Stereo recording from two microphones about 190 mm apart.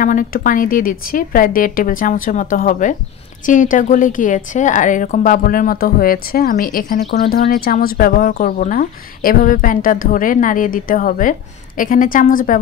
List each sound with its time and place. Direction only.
0.0 s a woman's voice: 45° left (ahead or behind)